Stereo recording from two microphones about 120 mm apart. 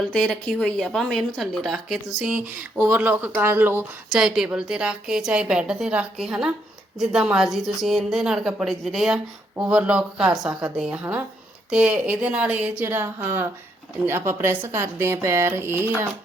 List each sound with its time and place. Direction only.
0.1 s a woman's voice: 5° left (ahead or behind)
2.2 s a woman's voice: 10° right (ahead or behind)
4.1 s a woman's voice: 5° right (ahead or behind)